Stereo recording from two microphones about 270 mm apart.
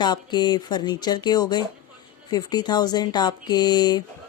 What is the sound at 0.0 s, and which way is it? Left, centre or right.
Speech, centre.